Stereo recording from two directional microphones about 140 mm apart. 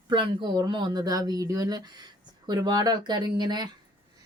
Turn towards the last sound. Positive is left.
turn(degrees=-30)  # may be behind; listen again after turning